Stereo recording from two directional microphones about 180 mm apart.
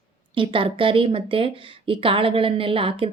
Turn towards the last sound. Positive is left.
turn(degrees=-30)  # may be behind; listen again after turning